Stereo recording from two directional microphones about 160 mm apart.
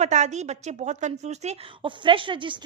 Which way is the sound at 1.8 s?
30° right (ahead or behind).